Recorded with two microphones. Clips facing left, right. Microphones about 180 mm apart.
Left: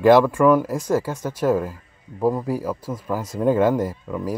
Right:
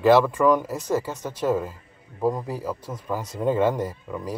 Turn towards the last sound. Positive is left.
turn(degrees=5)  # may be behind; listen again after turning